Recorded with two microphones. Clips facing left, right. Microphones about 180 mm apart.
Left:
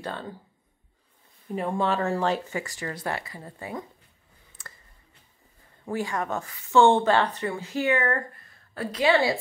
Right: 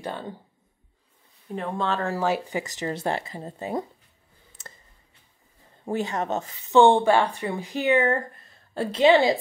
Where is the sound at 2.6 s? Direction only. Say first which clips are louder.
Right 5 dB; 20° right (ahead or behind).